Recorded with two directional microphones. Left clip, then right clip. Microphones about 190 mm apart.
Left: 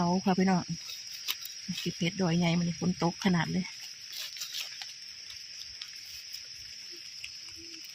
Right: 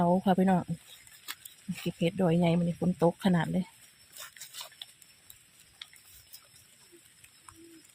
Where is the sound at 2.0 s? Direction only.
45° right (ahead or behind).